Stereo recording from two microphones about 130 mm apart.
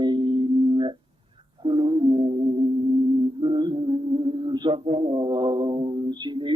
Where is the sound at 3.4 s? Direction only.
35° right (ahead or behind).